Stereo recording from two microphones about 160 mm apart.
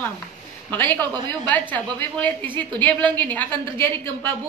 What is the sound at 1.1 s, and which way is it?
Speech, 25° right (ahead or behind).